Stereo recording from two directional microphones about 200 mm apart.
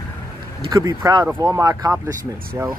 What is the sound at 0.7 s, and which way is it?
Speech, 20° right (ahead or behind).